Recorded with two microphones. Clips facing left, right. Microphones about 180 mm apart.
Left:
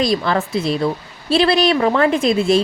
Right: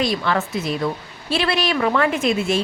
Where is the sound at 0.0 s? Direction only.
35° left (ahead or behind).